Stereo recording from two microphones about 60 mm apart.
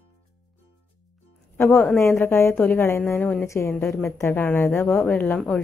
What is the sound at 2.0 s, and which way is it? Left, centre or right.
Speech, left.